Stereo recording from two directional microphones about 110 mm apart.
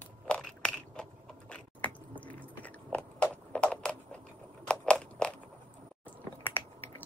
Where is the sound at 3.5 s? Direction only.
10° left (ahead or behind).